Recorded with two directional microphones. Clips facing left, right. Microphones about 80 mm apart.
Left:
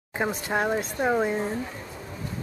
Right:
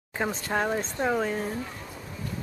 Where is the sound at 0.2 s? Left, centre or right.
Centre.